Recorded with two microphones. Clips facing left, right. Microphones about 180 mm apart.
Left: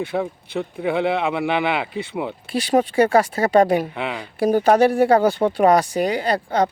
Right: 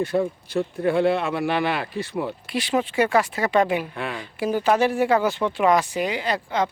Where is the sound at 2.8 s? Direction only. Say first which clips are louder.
Left 5 dB; 40° left (ahead or behind).